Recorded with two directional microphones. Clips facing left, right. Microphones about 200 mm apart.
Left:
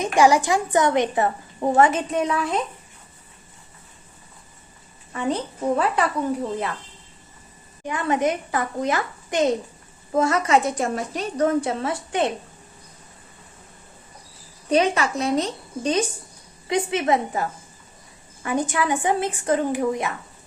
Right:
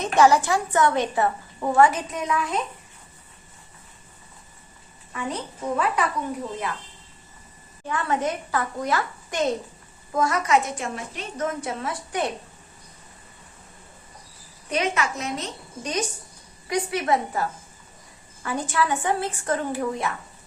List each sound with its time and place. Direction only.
0.0 s a woman's voice: 10° left (ahead or behind); by 2.5 s 30° left (ahead or behind)
5.1 s a woman's voice: 30° left (ahead or behind)
7.9 s a woman's voice: 15° left (ahead or behind)
14.7 s a woman's voice: 35° left (ahead or behind)
18.4 s a woman's voice: 15° left (ahead or behind)